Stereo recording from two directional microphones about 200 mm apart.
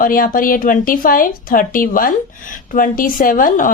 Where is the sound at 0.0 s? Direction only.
45° left (ahead or behind).